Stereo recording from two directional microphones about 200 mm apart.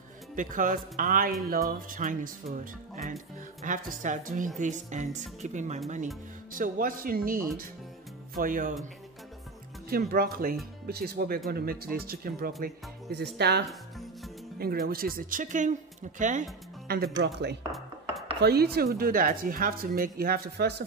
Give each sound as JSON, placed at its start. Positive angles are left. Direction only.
{"t": 0.4, "sound": "a woman's voice", "side_deg": -40}
{"t": 9.8, "sound": "speech", "side_deg": -50}
{"t": 13.7, "sound": "music", "side_deg": 0}
{"t": 14.6, "sound": "a woman's voice", "side_deg": -50}
{"t": 16.8, "sound": "speech", "side_deg": -50}